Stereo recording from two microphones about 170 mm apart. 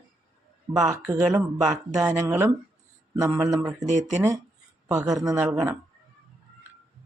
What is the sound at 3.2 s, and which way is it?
Speech, 15° right (ahead or behind).